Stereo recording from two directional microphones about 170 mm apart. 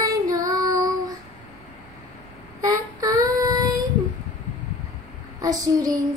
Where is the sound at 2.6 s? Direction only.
20° right (ahead or behind).